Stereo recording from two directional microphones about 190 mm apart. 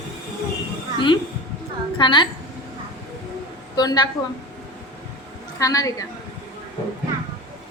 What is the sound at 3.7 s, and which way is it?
Speech, 20° left (ahead or behind).